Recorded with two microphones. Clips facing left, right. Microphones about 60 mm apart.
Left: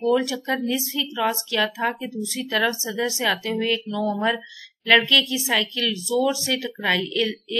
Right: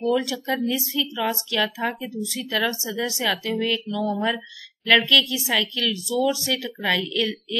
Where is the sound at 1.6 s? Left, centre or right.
Centre.